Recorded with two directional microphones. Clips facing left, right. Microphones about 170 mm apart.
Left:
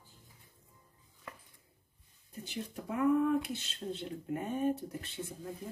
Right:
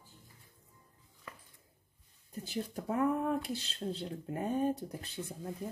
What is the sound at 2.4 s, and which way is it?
Speech, 40° right (ahead or behind).